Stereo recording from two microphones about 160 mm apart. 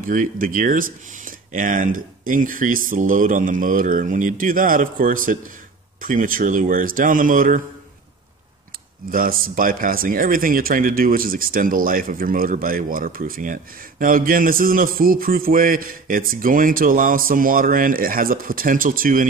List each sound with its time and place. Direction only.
0.0 s speech: 55° right (ahead or behind)
9.1 s speech: 65° right (ahead or behind)